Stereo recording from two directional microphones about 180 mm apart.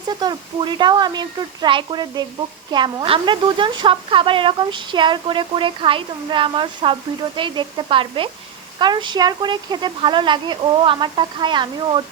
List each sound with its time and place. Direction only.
0.1 s speech: 25° right (ahead or behind)